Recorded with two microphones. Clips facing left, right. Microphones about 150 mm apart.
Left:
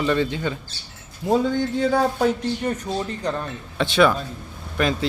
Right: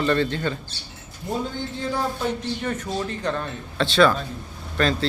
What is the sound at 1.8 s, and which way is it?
Speech, 70° left (ahead or behind).